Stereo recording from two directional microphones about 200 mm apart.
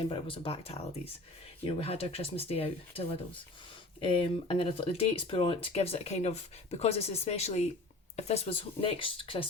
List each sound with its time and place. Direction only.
0.1 s speech: 25° left (ahead or behind)